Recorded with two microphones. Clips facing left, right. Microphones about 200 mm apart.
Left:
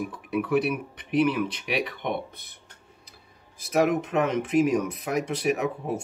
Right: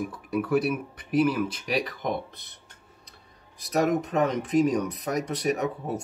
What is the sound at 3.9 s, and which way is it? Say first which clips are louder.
Speech: even; 40° right (ahead or behind).